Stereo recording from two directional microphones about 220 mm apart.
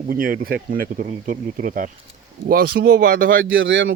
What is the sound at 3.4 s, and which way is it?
Speech, 60° right (ahead or behind).